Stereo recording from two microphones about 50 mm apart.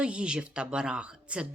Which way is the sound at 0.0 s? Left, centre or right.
Right.